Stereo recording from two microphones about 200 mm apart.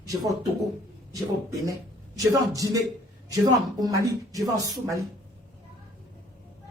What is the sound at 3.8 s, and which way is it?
Speech, 15° right (ahead or behind).